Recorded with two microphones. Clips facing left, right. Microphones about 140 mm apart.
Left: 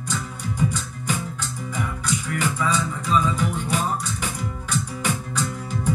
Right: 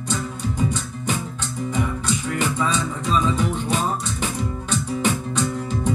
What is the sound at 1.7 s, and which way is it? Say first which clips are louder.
Music: right 3 dB; 20° right (ahead or behind).